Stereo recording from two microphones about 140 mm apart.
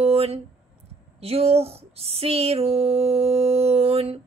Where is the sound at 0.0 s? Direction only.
45° right (ahead or behind).